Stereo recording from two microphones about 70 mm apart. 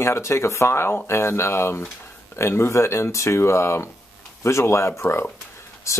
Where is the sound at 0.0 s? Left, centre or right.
Left.